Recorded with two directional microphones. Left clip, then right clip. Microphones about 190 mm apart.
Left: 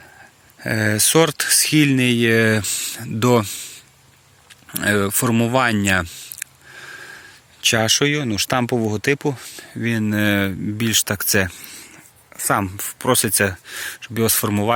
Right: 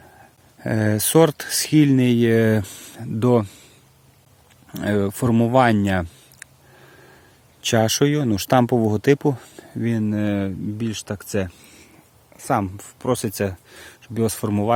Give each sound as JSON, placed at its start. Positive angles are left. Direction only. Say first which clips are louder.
{"t": 0.6, "sound": "speech", "louder": "left 3 dB", "side_deg": -15}
{"t": 4.7, "sound": "a sound", "louder": "left 4 dB", "side_deg": -5}
{"t": 7.6, "sound": "speech", "louder": "left 2 dB", "side_deg": -15}